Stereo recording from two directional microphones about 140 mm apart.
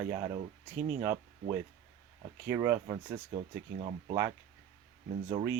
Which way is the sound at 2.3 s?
15° right (ahead or behind).